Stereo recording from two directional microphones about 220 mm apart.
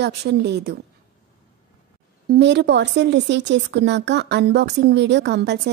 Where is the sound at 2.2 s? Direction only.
50° right (ahead or behind).